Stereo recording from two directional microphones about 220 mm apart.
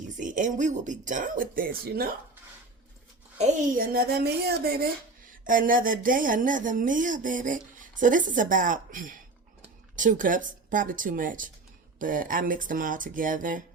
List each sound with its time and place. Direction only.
0.2 s speech: 35° right (ahead or behind)
3.3 s speech: 35° right (ahead or behind)